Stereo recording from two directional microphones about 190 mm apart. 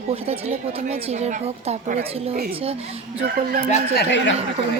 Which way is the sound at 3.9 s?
70° left (ahead or behind).